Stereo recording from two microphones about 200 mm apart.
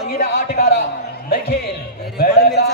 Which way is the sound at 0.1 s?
35° left (ahead or behind).